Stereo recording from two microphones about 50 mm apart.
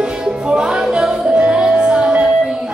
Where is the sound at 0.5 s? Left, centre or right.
Centre.